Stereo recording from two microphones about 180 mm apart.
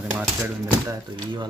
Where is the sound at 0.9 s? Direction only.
25° right (ahead or behind).